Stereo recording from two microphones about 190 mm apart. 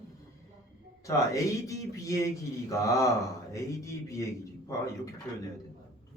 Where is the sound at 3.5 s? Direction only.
15° left (ahead or behind).